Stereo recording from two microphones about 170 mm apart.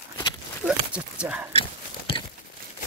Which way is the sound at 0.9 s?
5° right (ahead or behind).